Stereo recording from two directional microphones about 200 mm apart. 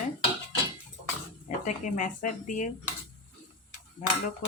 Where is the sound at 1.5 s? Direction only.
40° left (ahead or behind).